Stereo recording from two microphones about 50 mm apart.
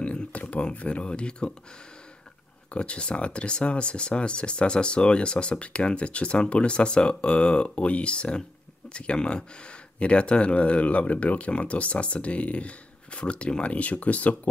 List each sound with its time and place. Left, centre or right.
0.0 s speech: left
2.7 s speech: left